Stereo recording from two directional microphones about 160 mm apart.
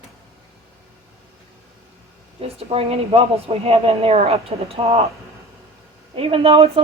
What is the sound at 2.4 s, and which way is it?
A woman's voice, 40° right (ahead or behind).